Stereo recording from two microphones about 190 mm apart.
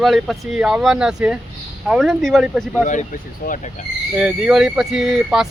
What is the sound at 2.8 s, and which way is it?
Speech, 40° left (ahead or behind).